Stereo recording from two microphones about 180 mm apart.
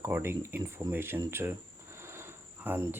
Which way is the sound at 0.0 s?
15° right (ahead or behind).